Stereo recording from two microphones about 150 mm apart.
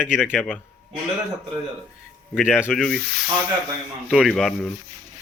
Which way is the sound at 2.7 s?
Centre (ahead or behind).